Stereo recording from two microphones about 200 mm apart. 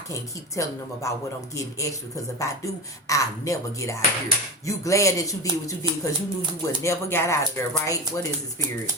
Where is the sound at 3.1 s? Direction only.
15° left (ahead or behind).